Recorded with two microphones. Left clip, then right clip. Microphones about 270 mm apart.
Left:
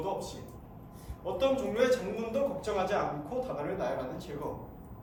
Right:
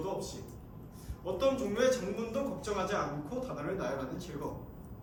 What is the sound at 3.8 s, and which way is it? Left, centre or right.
Speech, centre.